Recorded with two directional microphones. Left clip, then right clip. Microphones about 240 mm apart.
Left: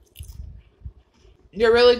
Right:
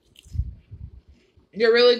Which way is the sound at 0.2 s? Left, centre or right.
Centre.